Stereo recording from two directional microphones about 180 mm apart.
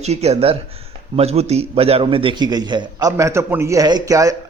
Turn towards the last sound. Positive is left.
turn(degrees=-20)  # may be behind; listen again after turning